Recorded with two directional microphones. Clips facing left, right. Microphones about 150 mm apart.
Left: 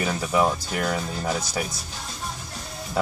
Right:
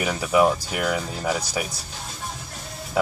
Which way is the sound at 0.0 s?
10° right (ahead or behind).